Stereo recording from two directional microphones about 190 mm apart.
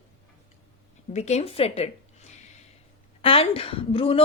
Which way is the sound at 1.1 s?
35° left (ahead or behind).